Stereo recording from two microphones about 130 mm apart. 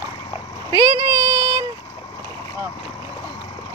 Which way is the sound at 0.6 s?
25° right (ahead or behind).